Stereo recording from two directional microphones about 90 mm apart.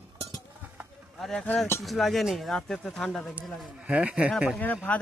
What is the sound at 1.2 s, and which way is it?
Speech, 5° left (ahead or behind).